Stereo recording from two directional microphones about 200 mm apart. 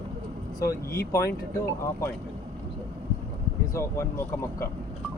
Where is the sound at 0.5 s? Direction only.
15° left (ahead or behind).